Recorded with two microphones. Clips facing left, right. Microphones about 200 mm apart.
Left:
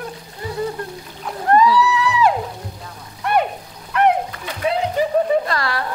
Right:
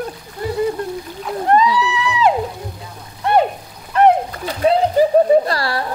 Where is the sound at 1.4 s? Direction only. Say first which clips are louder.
Left 1 dB; 20° right (ahead or behind).